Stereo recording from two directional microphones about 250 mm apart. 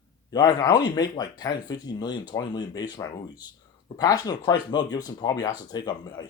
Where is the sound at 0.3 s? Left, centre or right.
Centre.